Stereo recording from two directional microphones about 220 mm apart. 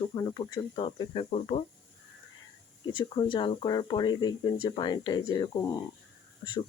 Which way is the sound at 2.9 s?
20° left (ahead or behind).